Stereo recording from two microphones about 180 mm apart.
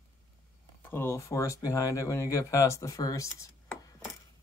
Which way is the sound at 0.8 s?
15° left (ahead or behind).